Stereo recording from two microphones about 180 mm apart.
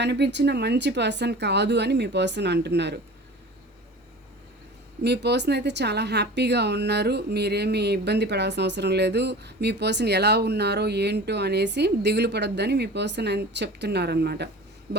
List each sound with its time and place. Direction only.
0.0 s speech: 70° right (ahead or behind)
5.0 s speech: 65° right (ahead or behind)